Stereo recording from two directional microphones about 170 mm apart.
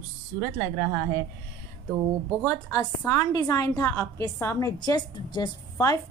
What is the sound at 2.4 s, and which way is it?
A woman's voice, 15° left (ahead or behind).